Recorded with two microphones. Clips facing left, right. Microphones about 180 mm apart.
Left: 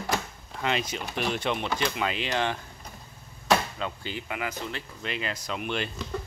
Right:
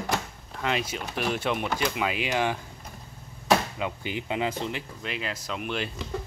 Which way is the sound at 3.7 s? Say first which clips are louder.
Right 3 dB; 15° right (ahead or behind).